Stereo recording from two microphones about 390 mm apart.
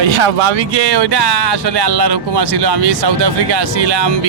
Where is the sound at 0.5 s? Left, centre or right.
Right.